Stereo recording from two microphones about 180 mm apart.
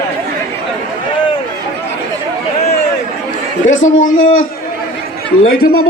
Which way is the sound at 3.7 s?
90° left.